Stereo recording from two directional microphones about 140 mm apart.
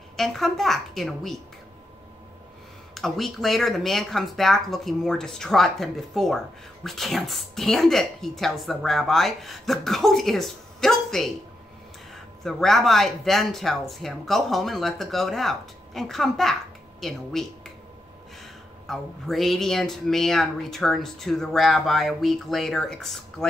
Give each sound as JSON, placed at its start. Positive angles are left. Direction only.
{"t": 0.1, "sound": "a woman's voice", "side_deg": 0}
{"t": 2.9, "sound": "speech", "side_deg": 0}
{"t": 12.4, "sound": "speech", "side_deg": 0}
{"t": 18.9, "sound": "speech", "side_deg": 0}